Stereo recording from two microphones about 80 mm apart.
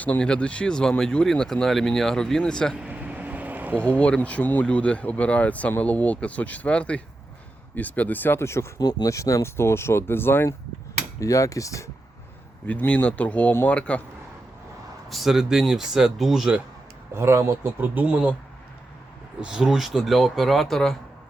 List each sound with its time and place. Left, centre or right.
0.0 s speech: centre
2.7 s vehicle: centre
3.8 s speech: centre; by 8.7 s left
8.8 s speech: left
9.0 s speech: left
9.6 s speech: left
11.2 s speech: left
12.6 s speech: centre
15.1 s speech: centre
17.2 s speech: right
17.7 s speech: right
19.4 s speech: centre